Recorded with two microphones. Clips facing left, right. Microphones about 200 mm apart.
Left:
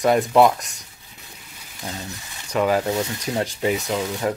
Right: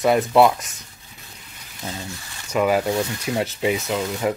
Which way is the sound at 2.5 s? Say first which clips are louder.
Right 1 dB; 10° right (ahead or behind).